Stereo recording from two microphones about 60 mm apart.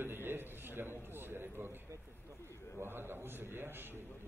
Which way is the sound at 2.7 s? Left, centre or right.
Right.